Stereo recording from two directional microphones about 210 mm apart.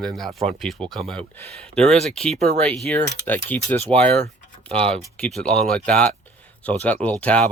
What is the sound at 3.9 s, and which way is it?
Speech, 30° right (ahead or behind).